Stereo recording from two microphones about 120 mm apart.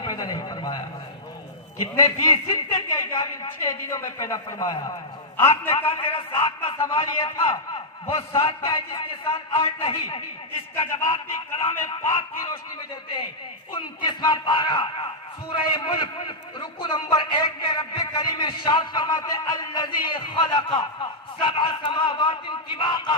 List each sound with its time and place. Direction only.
0.0 s a sound: 35° left (ahead or behind)
2.0 s a man's voice: 30° left (ahead or behind)
2.3 s a woman's voice: 45° left (ahead or behind)
3.8 s a man's voice: 30° left (ahead or behind)
5.4 s speech: 20° left (ahead or behind)
6.0 s a woman's voice: 45° left (ahead or behind)
11.0 s speech: 25° left (ahead or behind)
13.7 s a man's voice: 40° left (ahead or behind)